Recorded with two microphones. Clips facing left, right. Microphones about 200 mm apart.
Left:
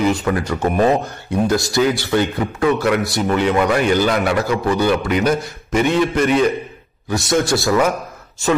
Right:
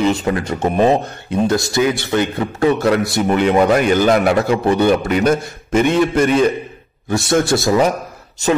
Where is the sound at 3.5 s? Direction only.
30° right (ahead or behind).